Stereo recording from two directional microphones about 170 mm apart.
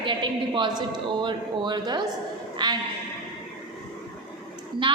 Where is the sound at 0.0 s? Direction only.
30° right (ahead or behind).